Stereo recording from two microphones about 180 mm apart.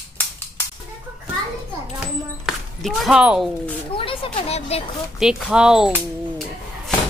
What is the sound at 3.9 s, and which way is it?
Speech, 30° left (ahead or behind).